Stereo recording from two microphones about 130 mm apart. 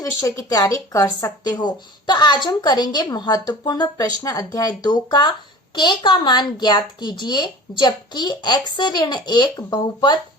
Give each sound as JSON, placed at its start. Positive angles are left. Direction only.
{"t": 0.0, "sound": "speech", "side_deg": 25}